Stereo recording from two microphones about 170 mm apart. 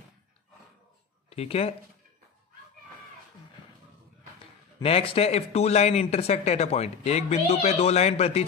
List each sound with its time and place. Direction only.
1.3 s speech: 35° left (ahead or behind)
4.8 s speech: 35° left (ahead or behind)